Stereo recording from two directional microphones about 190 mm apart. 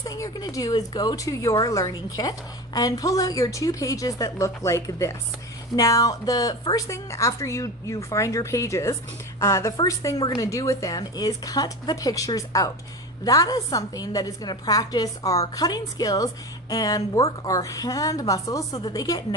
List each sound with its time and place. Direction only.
0.0 s a woman's voice: 20° left (ahead or behind)